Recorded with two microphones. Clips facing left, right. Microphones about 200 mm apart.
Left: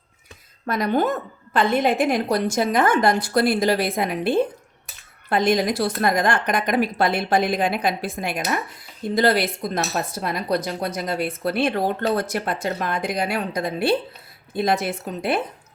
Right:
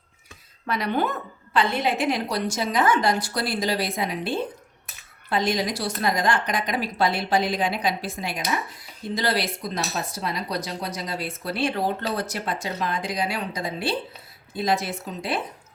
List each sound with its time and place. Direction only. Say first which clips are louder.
0.6 s speech: left 4 dB; 45° left (ahead or behind)